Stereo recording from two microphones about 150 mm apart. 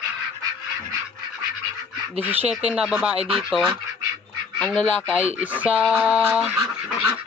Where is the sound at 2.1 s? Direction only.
10° right (ahead or behind).